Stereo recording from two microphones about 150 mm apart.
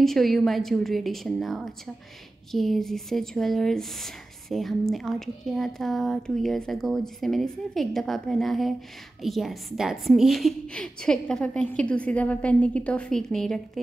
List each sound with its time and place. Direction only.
0.0 s speech: centre (ahead or behind)